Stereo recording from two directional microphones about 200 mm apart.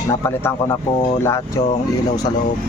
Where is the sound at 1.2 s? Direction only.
15° left (ahead or behind).